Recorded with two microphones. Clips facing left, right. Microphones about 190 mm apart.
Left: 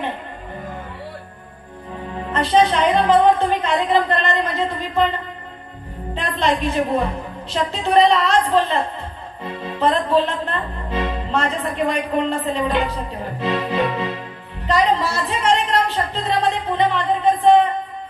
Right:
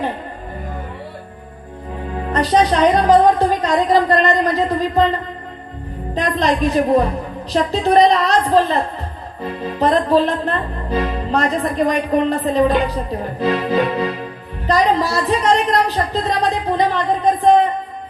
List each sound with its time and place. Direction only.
2.3 s music: 40° right (ahead or behind)
6.1 s music: 40° right (ahead or behind)
14.7 s a woman's voice: 40° right (ahead or behind)